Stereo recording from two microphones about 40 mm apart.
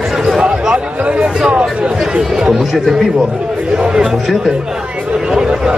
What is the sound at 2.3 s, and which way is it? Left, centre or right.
Chatter, centre.